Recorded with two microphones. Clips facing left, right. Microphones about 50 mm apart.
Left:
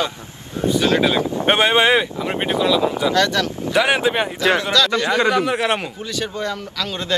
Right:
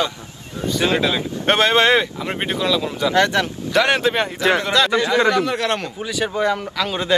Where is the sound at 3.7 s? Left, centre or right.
Centre.